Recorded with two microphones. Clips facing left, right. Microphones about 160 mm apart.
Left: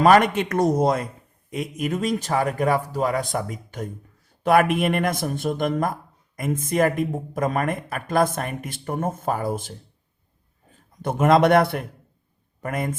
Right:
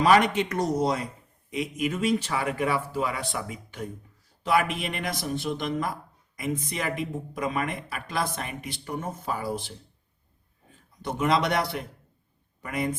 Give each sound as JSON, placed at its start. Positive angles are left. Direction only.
{"t": 0.0, "sound": "speech", "side_deg": 50}
{"t": 4.4, "sound": "speech", "side_deg": 55}
{"t": 11.0, "sound": "speech", "side_deg": 50}